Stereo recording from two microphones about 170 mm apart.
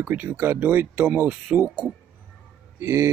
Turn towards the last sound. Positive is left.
turn(degrees=-15)  # may be behind; listen again after turning